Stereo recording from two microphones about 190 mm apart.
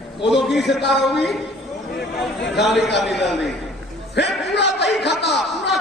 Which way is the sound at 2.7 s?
65° left (ahead or behind).